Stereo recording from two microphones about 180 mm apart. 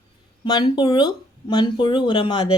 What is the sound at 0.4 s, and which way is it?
Speech, 20° left (ahead or behind).